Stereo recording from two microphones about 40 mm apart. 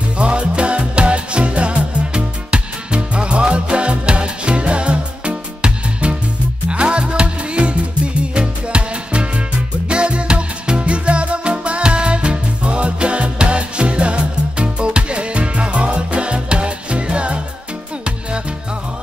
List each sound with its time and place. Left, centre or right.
0.2 s music: right